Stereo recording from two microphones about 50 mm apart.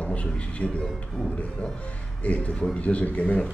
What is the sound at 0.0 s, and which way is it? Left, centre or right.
A man's voice, left.